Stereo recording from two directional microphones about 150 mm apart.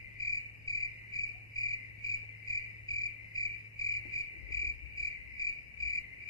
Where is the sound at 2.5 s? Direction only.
25° left (ahead or behind).